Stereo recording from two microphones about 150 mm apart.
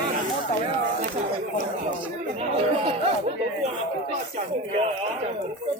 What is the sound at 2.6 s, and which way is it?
Speech, 40° right (ahead or behind).